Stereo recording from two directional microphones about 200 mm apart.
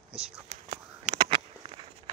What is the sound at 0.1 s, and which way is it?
Whispering, 35° right (ahead or behind).